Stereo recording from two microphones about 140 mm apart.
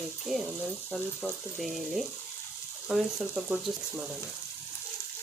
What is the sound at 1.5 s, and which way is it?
Speech, centre (ahead or behind).